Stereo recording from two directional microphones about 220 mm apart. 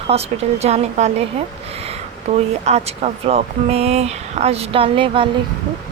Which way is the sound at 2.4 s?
30° right (ahead or behind).